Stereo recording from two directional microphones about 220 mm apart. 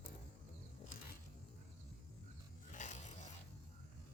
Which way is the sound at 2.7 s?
35° left (ahead or behind).